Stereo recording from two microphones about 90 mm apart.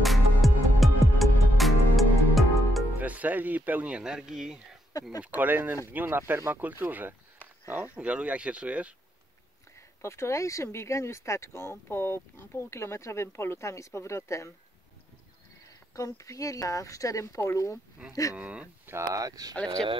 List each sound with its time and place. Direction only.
0.0 s music: centre (ahead or behind)
3.0 s speech: 20° right (ahead or behind)
5.2 s speech: 20° right (ahead or behind)
10.0 s speech: 30° left (ahead or behind)
15.9 s speech: 35° left (ahead or behind)
18.3 s speech: 15° right (ahead or behind)
18.9 s speech: 35° right (ahead or behind)